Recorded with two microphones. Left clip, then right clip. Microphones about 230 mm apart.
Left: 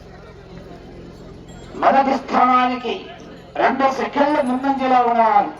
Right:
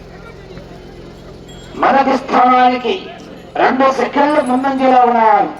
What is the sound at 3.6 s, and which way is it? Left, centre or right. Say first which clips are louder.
Speech: right 5 dB; left.